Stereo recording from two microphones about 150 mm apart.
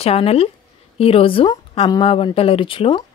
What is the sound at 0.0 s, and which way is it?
Speech, 40° left (ahead or behind).